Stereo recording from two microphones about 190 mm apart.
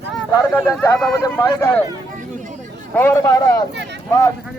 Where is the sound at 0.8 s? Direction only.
5° left (ahead or behind).